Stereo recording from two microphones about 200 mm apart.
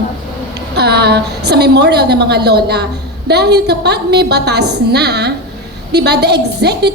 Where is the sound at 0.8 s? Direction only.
55° right (ahead or behind).